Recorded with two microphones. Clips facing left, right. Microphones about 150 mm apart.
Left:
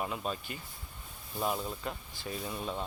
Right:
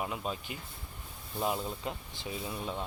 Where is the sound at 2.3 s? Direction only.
5° right (ahead or behind).